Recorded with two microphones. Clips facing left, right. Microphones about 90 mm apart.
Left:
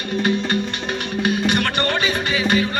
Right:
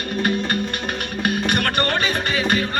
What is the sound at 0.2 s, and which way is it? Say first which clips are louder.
Music: left 1 dB; 50° right (ahead or behind).